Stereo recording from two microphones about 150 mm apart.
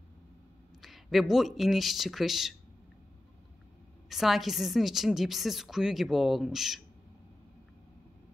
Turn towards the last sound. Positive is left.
turn(degrees=0)  # may be behind; listen again after turning